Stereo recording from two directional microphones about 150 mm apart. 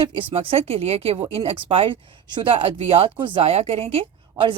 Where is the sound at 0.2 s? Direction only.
35° right (ahead or behind).